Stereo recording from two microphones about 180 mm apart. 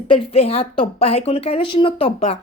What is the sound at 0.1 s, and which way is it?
Speech, 35° left (ahead or behind).